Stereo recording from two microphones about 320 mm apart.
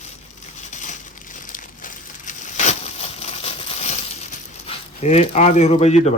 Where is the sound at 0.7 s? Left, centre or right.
Left.